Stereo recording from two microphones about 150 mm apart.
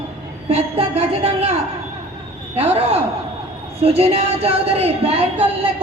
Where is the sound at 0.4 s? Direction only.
40° right (ahead or behind).